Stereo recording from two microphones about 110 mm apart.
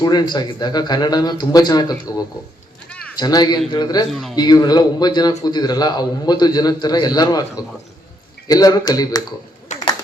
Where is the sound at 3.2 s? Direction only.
40° left (ahead or behind).